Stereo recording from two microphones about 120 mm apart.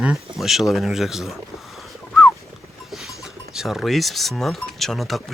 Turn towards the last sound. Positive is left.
turn(degrees=0)  # may be behind; listen again after turning